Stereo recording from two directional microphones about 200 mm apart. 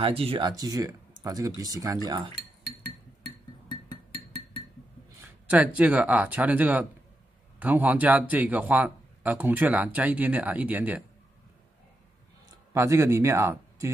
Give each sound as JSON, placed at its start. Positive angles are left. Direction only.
{"t": 0.0, "sound": "speech", "side_deg": -25}
{"t": 5.2, "sound": "speech", "side_deg": -5}
{"t": 12.7, "sound": "speech", "side_deg": -15}